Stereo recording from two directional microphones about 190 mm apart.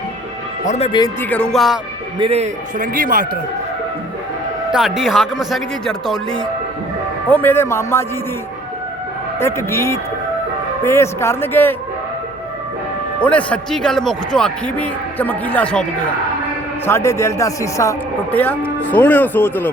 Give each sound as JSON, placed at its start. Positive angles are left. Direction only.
{"t": 0.6, "sound": "speech", "side_deg": 40}
{"t": 0.9, "sound": "speech", "side_deg": 25}
{"t": 1.2, "sound": "a man's voice", "side_deg": 5}
{"t": 2.1, "sound": "a man's voice", "side_deg": -30}
{"t": 4.7, "sound": "a man's voice", "side_deg": 0}
{"t": 9.4, "sound": "a man's voice", "side_deg": 15}
{"t": 13.1, "sound": "a man's voice", "side_deg": 5}